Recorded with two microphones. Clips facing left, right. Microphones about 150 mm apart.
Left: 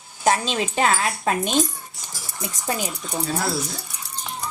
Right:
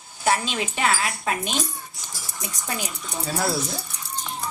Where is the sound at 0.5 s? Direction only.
35° left (ahead or behind).